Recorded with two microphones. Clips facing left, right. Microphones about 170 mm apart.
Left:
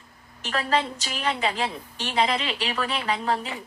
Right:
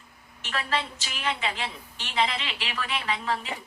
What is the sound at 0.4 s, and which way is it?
A woman's voice, 40° left (ahead or behind).